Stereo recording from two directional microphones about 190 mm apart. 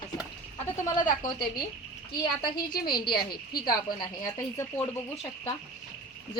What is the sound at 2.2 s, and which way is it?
Speech, 25° left (ahead or behind).